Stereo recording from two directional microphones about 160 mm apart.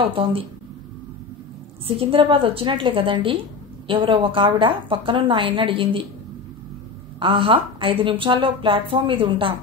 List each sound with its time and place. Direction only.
0.0 s a woman's voice: 35° right (ahead or behind)
2.0 s a woman's voice: 35° right (ahead or behind)
7.2 s a woman's voice: 35° right (ahead or behind)